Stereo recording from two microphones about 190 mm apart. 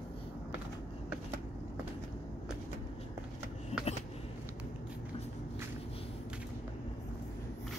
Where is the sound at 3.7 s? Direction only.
35° left (ahead or behind).